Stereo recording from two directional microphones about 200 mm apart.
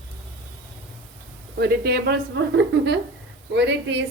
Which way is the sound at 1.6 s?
55° right (ahead or behind).